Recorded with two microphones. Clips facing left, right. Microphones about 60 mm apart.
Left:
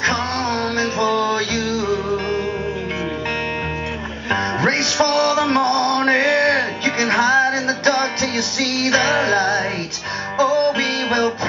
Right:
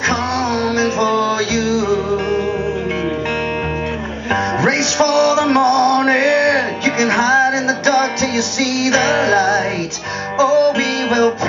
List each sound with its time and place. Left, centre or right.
0.1 s music: centre
4.3 s music: centre